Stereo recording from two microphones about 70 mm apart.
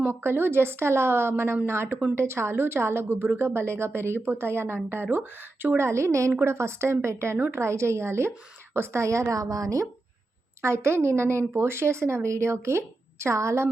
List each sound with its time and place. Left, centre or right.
0.1 s a woman's voice: right
10.6 s a woman's voice: right